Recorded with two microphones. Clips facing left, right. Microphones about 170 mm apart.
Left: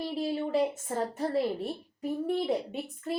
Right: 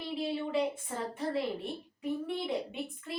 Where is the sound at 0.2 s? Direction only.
45° left (ahead or behind).